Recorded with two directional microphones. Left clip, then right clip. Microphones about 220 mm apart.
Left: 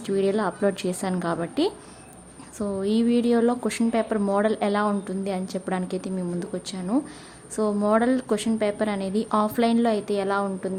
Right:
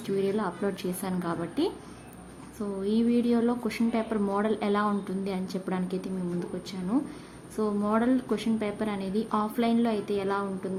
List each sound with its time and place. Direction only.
0.0 s a woman's voice: 15° left (ahead or behind)